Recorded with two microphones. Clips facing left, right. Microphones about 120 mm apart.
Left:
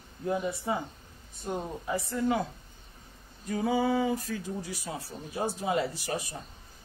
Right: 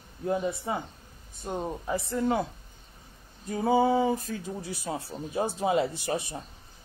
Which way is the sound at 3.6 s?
30° right (ahead or behind).